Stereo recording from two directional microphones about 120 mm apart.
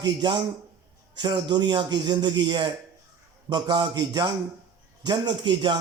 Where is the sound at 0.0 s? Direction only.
40° right (ahead or behind).